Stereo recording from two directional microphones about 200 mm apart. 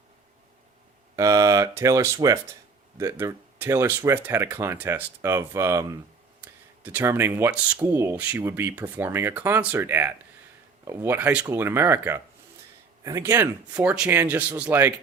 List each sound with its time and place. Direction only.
1.1 s speech: 15° right (ahead or behind)